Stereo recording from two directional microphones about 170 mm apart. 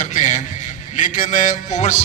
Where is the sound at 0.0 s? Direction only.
45° left (ahead or behind).